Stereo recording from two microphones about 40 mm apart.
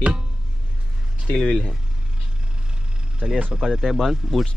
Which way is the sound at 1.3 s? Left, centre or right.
Centre.